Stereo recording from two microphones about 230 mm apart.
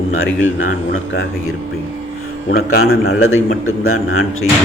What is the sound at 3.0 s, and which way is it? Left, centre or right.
A man's voice, left.